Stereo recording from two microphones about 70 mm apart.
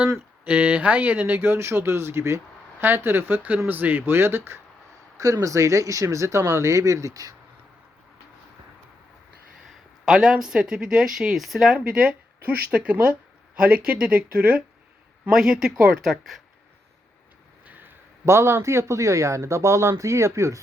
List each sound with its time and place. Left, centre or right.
0.4 s speech: right
5.2 s speech: right
10.1 s speech: centre
15.3 s speech: centre
17.7 s a sound: right
18.3 s speech: right